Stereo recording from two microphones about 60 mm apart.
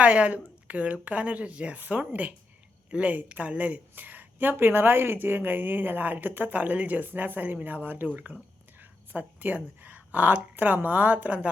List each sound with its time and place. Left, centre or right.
0.0 s speech: right